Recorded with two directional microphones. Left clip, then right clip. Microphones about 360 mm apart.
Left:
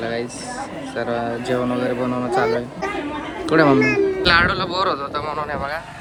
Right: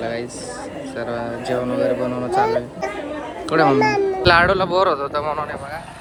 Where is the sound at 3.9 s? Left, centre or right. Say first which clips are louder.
Right 1 dB; centre.